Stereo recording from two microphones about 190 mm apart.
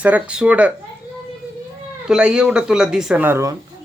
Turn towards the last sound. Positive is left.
turn(degrees=-15)  # may be behind; listen again after turning